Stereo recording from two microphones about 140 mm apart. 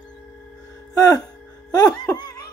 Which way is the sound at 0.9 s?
25° left (ahead or behind).